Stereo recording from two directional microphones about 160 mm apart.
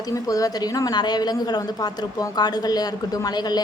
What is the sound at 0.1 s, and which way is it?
A woman's voice, 20° left (ahead or behind).